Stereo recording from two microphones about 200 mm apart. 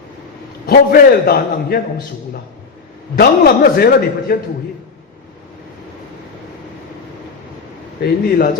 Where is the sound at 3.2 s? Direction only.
50° left (ahead or behind).